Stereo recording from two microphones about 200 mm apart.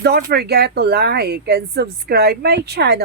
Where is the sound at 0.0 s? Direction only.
55° right (ahead or behind).